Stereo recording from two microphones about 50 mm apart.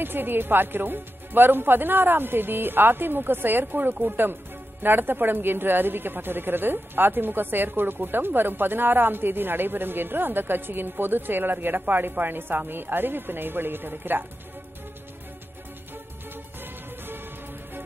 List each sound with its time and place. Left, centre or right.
0.0 s a woman's voice: right